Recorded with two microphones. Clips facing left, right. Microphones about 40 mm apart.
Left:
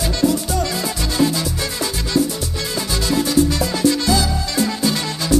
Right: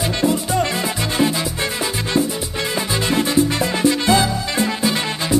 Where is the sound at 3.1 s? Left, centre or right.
Right.